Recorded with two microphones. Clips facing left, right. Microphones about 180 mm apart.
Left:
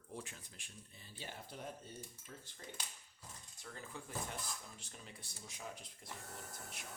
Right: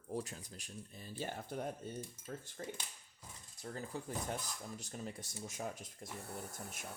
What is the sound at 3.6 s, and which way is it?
Speech, 40° right (ahead or behind).